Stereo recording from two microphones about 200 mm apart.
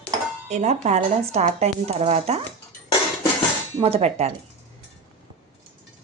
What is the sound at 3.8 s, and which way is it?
Speech, 30° right (ahead or behind).